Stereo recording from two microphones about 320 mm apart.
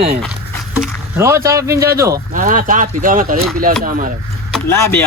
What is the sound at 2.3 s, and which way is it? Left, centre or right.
Speech, right.